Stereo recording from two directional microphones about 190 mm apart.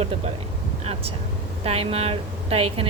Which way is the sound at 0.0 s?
30° right (ahead or behind).